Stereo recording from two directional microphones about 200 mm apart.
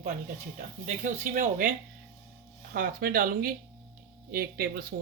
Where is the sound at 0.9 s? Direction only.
40° right (ahead or behind).